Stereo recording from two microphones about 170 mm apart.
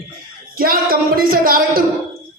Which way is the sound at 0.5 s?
60° right (ahead or behind).